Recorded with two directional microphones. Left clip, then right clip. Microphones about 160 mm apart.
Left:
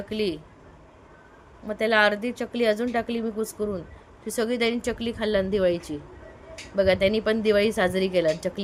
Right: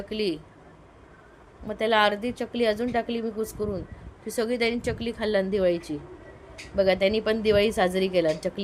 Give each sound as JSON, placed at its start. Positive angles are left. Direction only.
{"t": 0.1, "sound": "a woman's voice", "side_deg": 5}
{"t": 1.6, "sound": "a woman's voice", "side_deg": 5}